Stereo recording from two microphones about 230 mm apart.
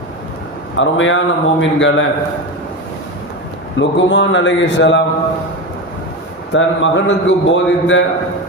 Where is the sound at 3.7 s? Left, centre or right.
Left.